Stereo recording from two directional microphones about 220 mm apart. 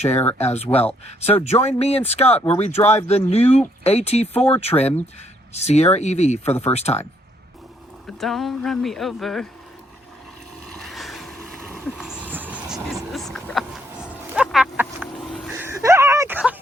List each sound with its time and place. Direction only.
0.3 s speech: 30° left (ahead or behind)
8.2 s speech: centre (ahead or behind)
10.8 s a sound: centre (ahead or behind)